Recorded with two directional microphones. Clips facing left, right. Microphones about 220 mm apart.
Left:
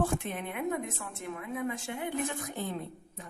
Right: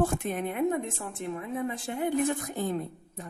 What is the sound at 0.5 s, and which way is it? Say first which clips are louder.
A woman's voice: right 4 dB; 30° right (ahead or behind).